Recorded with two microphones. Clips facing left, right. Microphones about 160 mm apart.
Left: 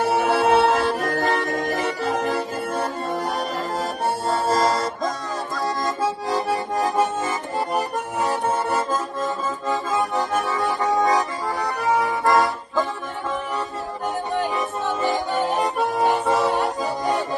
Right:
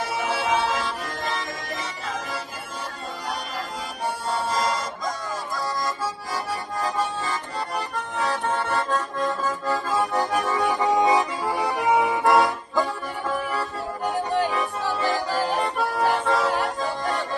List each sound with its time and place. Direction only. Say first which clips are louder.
0.2 s music: left 6 dB; 60° left (ahead or behind)
4.3 s music: left 5 dB; 45° left (ahead or behind)
5.8 s accordion: left 5 dB; 20° left (ahead or behind)
8.7 s accordion: left 2 dB; centre (ahead or behind)
10.8 s accordion: even; 20° right (ahead or behind)
12.2 s accordion: even; centre (ahead or behind)
14.4 s music: left 1 dB; centre (ahead or behind)